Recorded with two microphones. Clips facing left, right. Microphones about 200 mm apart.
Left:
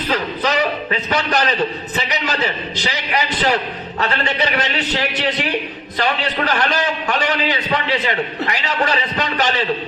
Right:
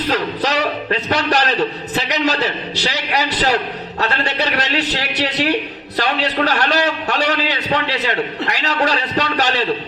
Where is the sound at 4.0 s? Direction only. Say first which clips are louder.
Even; 40° right (ahead or behind).